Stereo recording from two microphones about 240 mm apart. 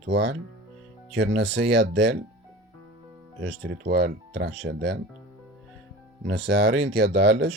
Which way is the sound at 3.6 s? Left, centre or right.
Right.